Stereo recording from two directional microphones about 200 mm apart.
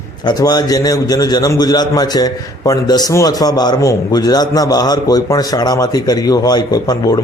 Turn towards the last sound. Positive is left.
turn(degrees=20)  # may be behind; listen again after turning